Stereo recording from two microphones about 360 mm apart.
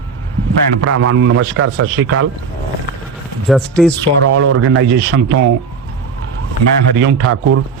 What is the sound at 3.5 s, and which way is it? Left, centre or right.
Speech, centre.